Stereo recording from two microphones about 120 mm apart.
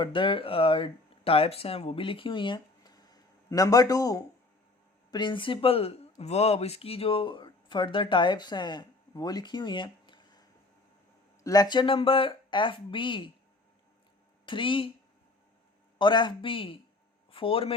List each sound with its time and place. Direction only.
0.0 s speech: 45° left (ahead or behind)
5.1 s speech: 40° left (ahead or behind)
11.4 s speech: 30° left (ahead or behind)
14.4 s speech: 45° left (ahead or behind)
16.0 s speech: 40° left (ahead or behind)